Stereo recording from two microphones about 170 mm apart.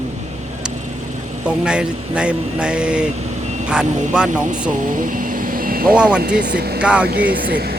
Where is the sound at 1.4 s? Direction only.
5° right (ahead or behind).